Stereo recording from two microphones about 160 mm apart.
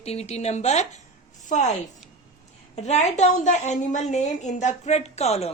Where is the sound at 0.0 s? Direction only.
40° left (ahead or behind).